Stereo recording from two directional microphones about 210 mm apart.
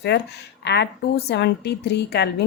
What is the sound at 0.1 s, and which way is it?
A woman's voice, 55° left (ahead or behind).